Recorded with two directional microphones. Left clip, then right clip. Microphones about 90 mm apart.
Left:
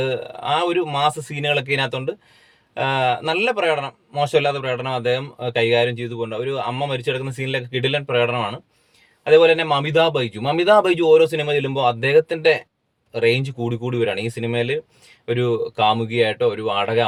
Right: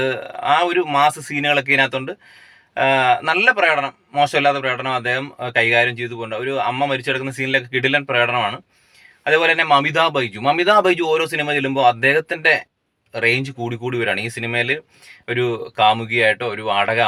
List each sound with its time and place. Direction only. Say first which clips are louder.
0.0 s a man's voice: right 2 dB; 25° left (ahead or behind)